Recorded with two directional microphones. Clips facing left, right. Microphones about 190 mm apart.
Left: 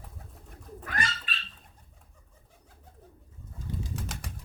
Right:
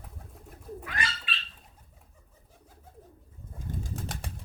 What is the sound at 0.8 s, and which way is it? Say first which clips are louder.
Bird: left 3 dB; 45° left (ahead or behind).